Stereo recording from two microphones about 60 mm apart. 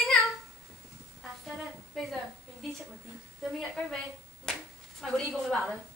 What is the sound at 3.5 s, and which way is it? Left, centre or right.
Speech, centre.